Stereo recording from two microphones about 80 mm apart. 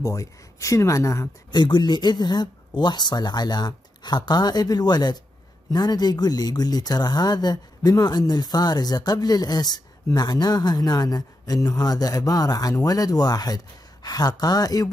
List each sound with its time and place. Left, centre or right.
0.0 s speech: left
1.5 s speech: left